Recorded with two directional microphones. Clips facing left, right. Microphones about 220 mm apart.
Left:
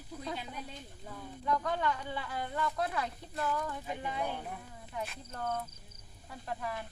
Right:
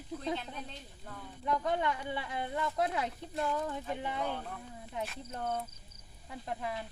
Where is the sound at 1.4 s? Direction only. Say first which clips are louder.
Right 1 dB; 20° right (ahead or behind).